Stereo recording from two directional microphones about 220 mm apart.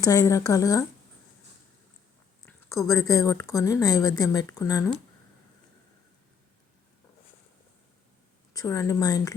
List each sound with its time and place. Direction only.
0.0 s a woman's voice: 15° left (ahead or behind)
2.5 s a woman's voice: 15° left (ahead or behind)
8.5 s a woman's voice: 15° left (ahead or behind)